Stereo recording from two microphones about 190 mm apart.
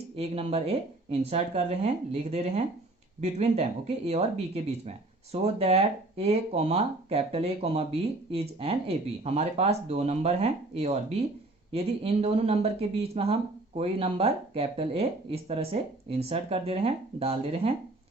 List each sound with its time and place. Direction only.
0.2 s speech: 30° right (ahead or behind)